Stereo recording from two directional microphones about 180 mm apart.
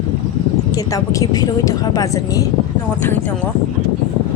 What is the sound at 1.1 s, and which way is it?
A woman's voice, 20° left (ahead or behind).